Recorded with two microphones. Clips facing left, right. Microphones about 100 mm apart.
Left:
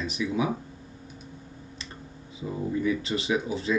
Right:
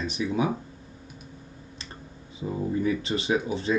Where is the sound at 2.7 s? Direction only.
35° right (ahead or behind).